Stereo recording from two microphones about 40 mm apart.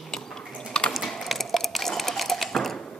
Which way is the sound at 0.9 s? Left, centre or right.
Centre.